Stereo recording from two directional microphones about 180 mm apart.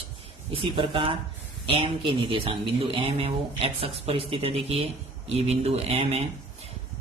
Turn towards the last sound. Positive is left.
turn(degrees=-35)  # may be behind; listen again after turning